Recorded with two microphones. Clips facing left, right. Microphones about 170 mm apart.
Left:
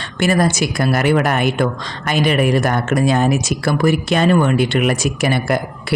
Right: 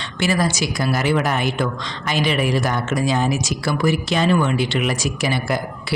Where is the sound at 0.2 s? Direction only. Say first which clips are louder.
Left 4 dB; 50° left (ahead or behind).